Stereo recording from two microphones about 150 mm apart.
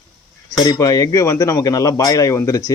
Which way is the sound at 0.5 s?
25° left (ahead or behind).